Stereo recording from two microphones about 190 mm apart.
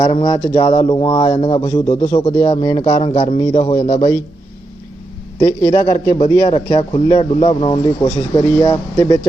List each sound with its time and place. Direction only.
0.0 s a man's voice: 30° left (ahead or behind)
3.8 s a man's voice: 35° left (ahead or behind)
5.4 s a man's voice: 20° left (ahead or behind)
8.0 s speech: 15° left (ahead or behind)